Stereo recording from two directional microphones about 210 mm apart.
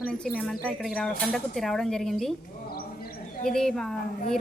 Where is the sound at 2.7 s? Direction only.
45° left (ahead or behind).